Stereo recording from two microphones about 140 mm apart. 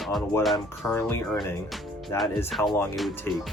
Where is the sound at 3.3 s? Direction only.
15° left (ahead or behind).